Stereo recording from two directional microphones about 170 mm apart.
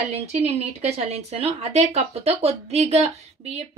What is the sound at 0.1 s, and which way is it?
A woman's voice, 40° right (ahead or behind).